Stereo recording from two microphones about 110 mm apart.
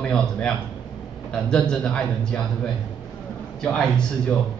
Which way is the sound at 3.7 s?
10° left (ahead or behind).